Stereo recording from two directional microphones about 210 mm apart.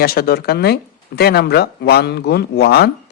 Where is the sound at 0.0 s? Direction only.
45° left (ahead or behind).